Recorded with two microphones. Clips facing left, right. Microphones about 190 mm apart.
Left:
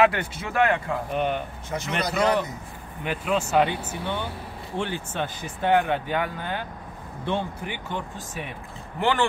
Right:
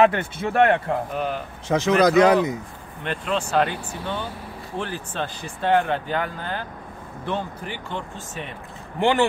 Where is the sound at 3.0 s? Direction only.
5° left (ahead or behind).